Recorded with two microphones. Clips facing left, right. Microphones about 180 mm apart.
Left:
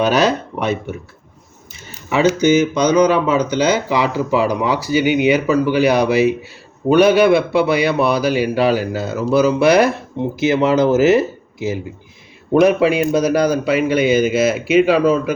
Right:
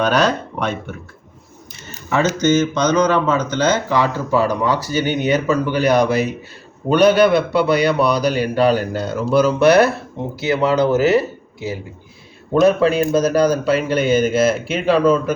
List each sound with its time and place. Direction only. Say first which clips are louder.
0.0 s speech: left 2 dB; 10° left (ahead or behind)
2.0 s speech: left 3 dB; 10° left (ahead or behind)